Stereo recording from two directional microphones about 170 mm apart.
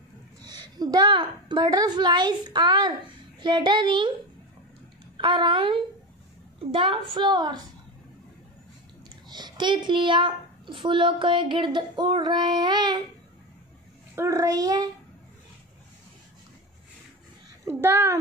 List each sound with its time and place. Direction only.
0.4 s a woman's voice: 25° right (ahead or behind)
5.1 s a child's voice: 30° right (ahead or behind)
9.3 s a child's voice: 25° right (ahead or behind)
14.1 s a child's voice: 20° right (ahead or behind)
17.6 s a child's voice: 15° right (ahead or behind)